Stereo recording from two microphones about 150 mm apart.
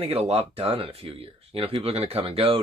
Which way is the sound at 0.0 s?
45° right (ahead or behind).